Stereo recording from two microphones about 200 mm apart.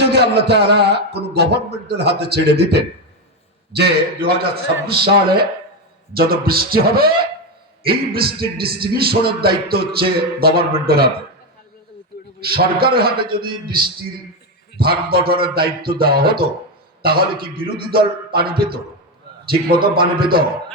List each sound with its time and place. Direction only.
0.1 s a man's voice: 55° right (ahead or behind)
12.4 s speech: 50° right (ahead or behind)